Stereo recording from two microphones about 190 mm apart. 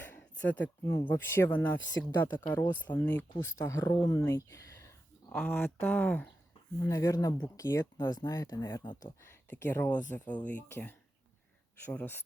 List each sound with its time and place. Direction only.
0.0 s a sound: 10° left (ahead or behind)
0.6 s speech: 15° left (ahead or behind)
1.8 s speech: 75° left (ahead or behind)
2.5 s speech: 10° left (ahead or behind)
4.1 s a sound: 15° left (ahead or behind)
5.4 s speech: 5° left (ahead or behind)